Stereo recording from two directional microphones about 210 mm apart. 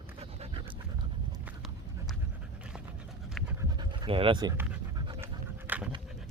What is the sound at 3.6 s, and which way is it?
Pant, 20° right (ahead or behind).